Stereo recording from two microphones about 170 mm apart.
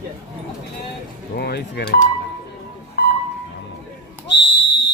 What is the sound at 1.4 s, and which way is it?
Speech, 75° left (ahead or behind).